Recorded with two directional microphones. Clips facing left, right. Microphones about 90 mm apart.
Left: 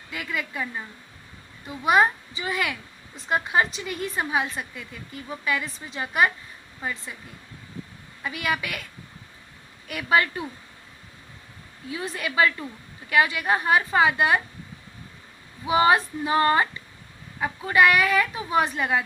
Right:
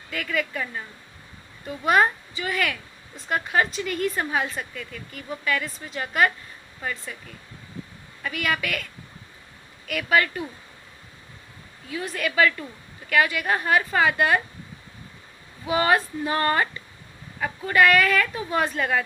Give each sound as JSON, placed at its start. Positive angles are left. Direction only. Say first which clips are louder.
{"t": 0.1, "sound": "a woman's voice", "louder": "right 3 dB", "side_deg": 20}
{"t": 9.8, "sound": "a woman's voice", "louder": "even", "side_deg": 25}
{"t": 11.9, "sound": "a woman's voice", "louder": "right 2 dB", "side_deg": 25}
{"t": 15.6, "sound": "a woman's voice", "louder": "left 2 dB", "side_deg": 20}